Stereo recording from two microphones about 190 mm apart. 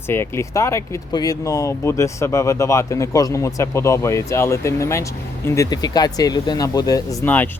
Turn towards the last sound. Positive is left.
turn(degrees=10)  # may be behind; listen again after turning